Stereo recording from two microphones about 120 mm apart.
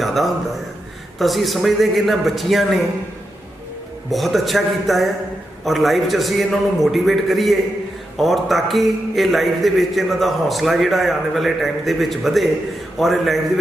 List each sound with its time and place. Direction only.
0.0 s a man's voice: centre (ahead or behind)
4.1 s a man's voice: centre (ahead or behind)